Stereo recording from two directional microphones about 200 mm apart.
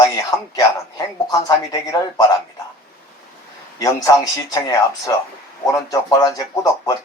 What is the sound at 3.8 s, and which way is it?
A man's voice, 15° left (ahead or behind).